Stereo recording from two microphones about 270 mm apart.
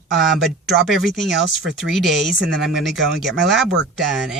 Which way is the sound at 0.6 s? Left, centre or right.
Centre.